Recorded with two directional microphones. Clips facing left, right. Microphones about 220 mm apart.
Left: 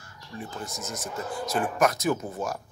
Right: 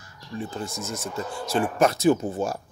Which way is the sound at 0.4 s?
30° right (ahead or behind).